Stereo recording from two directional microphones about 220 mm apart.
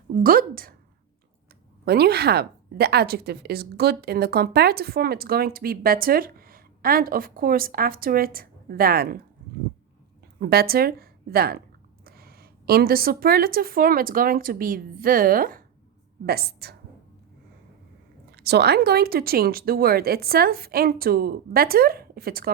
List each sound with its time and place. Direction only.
0.2 s a woman's voice: 40° right (ahead or behind)
1.8 s a woman's voice: 45° right (ahead or behind)
10.4 s a woman's voice: 45° right (ahead or behind)
18.3 s a woman's voice: 50° right (ahead or behind)